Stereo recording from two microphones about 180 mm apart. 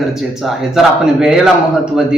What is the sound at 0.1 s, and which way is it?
Speech, centre (ahead or behind).